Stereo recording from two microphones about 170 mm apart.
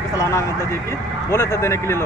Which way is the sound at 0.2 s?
15° left (ahead or behind).